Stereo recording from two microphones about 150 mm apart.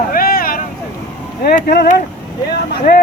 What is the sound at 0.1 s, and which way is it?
Vehicle, 75° left (ahead or behind).